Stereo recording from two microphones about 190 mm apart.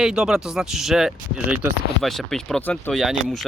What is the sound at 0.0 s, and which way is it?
Speech, 5° right (ahead or behind).